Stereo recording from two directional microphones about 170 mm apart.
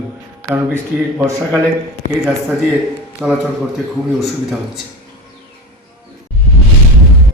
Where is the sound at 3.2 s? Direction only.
5° right (ahead or behind).